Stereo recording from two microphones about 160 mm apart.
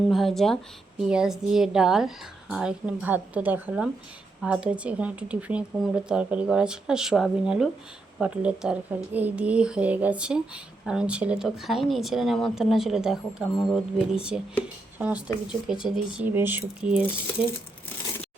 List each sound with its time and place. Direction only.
0.1 s speech: centre (ahead or behind)